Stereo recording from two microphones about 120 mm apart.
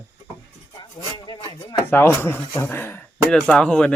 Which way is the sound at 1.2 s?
45° left (ahead or behind).